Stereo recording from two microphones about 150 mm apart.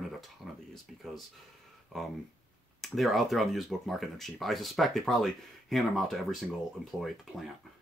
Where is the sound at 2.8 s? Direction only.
Centre (ahead or behind).